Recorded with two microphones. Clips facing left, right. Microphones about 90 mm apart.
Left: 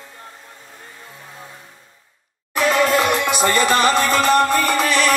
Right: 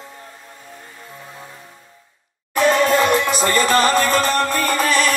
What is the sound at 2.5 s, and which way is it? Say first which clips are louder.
Music: right 1 dB; 40° right (ahead or behind).